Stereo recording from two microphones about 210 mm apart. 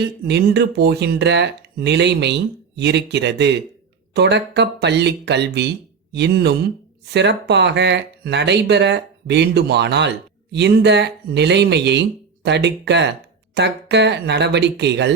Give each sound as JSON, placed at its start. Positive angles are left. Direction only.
{"t": 0.3, "sound": "speech", "side_deg": -50}